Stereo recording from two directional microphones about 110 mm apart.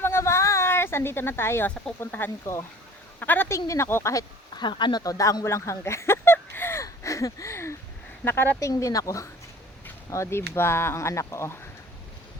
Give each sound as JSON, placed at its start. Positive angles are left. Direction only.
{"t": 0.0, "sound": "a sound", "side_deg": 25}
{"t": 2.0, "sound": "speech", "side_deg": 20}
{"t": 4.6, "sound": "speech", "side_deg": 40}